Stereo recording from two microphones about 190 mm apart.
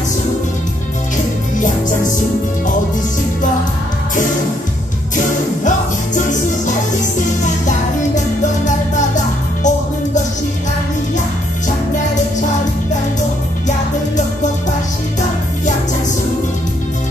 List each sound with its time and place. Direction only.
5.1 s music: 40° left (ahead or behind)